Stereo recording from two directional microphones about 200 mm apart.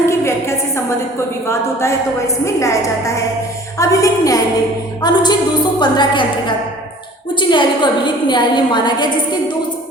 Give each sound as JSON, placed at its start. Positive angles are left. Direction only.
{"t": 0.0, "sound": "a sound", "side_deg": 15}
{"t": 1.5, "sound": "a woman's voice", "side_deg": 15}
{"t": 7.3, "sound": "a woman's voice", "side_deg": 25}